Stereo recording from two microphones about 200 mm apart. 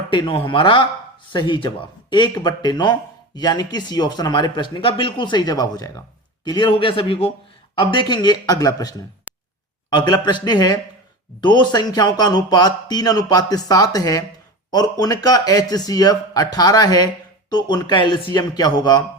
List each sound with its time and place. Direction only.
0.1 s speech: 25° left (ahead or behind)
9.3 s a sound: 5° right (ahead or behind)
9.9 s speech: 20° left (ahead or behind)